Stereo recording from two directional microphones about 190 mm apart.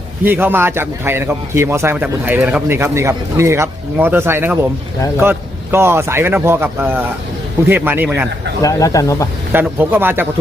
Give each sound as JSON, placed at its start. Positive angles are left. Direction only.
{"t": 0.3, "sound": "a man's voice", "side_deg": -10}
{"t": 8.6, "sound": "speech", "side_deg": 15}
{"t": 9.5, "sound": "a man's voice", "side_deg": -10}